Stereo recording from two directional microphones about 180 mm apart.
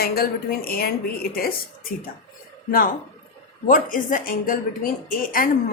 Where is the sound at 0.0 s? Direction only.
55° left (ahead or behind).